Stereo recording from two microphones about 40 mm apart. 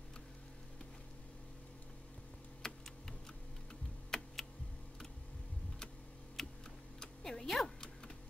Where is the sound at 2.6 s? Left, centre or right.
Centre.